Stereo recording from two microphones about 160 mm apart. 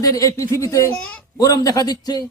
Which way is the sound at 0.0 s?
20° left (ahead or behind).